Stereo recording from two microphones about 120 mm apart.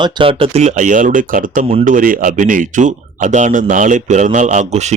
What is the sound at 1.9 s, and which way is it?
Speech, 90° right.